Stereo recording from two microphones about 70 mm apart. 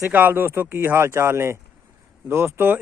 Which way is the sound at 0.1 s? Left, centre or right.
Right.